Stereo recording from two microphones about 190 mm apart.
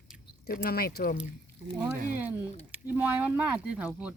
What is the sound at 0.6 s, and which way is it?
Speech, 50° left (ahead or behind).